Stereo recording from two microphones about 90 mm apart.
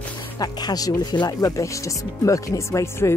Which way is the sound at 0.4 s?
45° left (ahead or behind).